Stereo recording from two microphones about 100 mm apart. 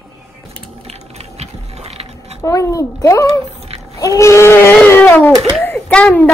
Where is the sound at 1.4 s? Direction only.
90° right.